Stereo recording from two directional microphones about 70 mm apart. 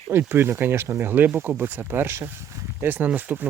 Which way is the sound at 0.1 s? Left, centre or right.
Right.